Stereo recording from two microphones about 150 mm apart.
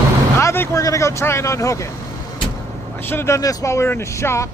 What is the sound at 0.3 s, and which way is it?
Speech, 15° left (ahead or behind).